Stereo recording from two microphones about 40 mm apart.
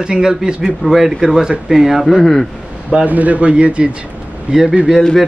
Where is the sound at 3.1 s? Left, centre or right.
Right.